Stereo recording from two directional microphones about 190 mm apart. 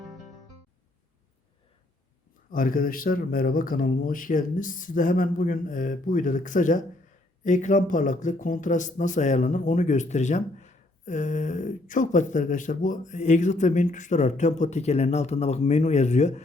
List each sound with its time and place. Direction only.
2.5 s speech: 45° left (ahead or behind)